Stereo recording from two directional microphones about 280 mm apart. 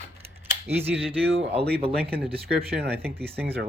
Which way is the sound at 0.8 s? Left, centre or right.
Centre.